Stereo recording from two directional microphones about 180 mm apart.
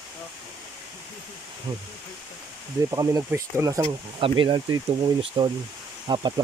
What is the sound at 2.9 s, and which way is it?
Speech, 20° right (ahead or behind).